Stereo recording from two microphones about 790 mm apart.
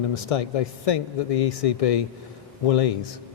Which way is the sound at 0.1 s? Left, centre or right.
Left.